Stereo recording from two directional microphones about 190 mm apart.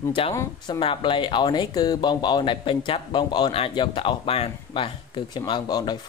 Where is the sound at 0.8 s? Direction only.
25° left (ahead or behind).